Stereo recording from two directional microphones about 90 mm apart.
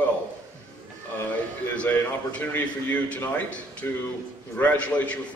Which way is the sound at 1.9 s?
20° left (ahead or behind).